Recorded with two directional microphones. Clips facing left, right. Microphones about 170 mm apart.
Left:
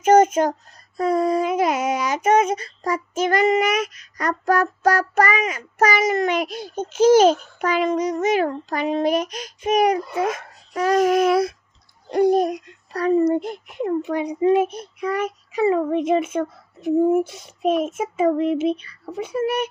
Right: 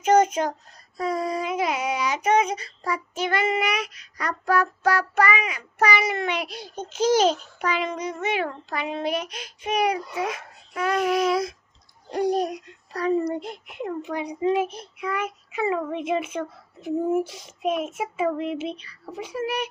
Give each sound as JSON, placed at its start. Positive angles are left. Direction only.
{"t": 0.0, "sound": "child singing", "side_deg": 50}
{"t": 12.9, "sound": "a child's voice", "side_deg": 60}
{"t": 14.9, "sound": "a child's voice", "side_deg": 35}
{"t": 17.6, "sound": "a child's voice", "side_deg": 35}